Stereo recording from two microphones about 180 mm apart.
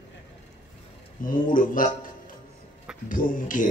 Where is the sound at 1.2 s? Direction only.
50° left (ahead or behind).